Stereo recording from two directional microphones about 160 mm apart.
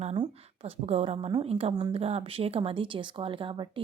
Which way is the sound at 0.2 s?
40° right (ahead or behind).